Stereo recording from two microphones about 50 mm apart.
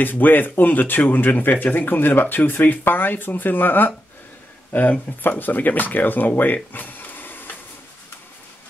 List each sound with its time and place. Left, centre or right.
0.0 s speech: left
5.1 s speech: left